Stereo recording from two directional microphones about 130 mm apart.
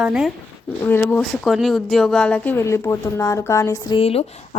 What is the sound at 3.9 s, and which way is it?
Speech, 50° left (ahead or behind).